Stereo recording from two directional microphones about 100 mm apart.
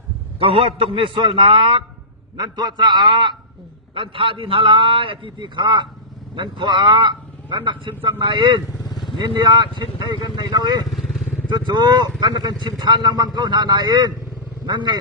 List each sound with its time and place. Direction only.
0.3 s a man's voice: 70° right (ahead or behind); by 1.8 s 55° right (ahead or behind)
2.3 s a man's voice: 40° right (ahead or behind)
10.9 s vehicle: centre (ahead or behind)
11.4 s a man's voice: 50° right (ahead or behind)